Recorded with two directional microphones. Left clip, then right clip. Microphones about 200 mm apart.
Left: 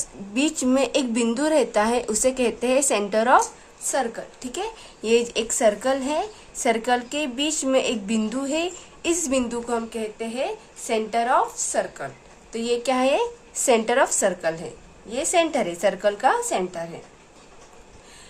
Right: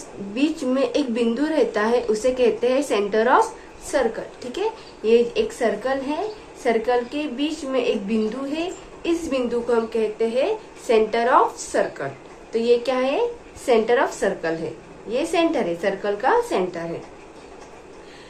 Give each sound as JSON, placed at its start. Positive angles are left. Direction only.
{"t": 0.3, "sound": "a woman's voice", "side_deg": 35}
{"t": 4.5, "sound": "a woman's voice", "side_deg": 40}